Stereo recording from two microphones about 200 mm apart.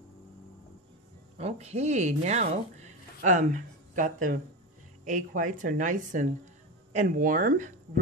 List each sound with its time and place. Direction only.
1.4 s speech: 30° right (ahead or behind)